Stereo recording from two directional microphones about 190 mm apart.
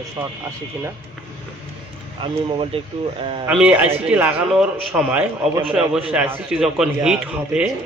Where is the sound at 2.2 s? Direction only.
30° right (ahead or behind).